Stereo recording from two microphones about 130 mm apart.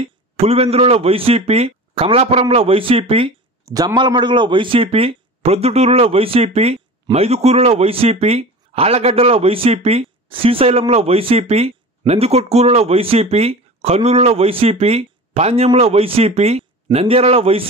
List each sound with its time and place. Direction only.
0.0 s speech: 50° right (ahead or behind)
3.6 s speech: 30° right (ahead or behind); by 17.6 s 50° right (ahead or behind)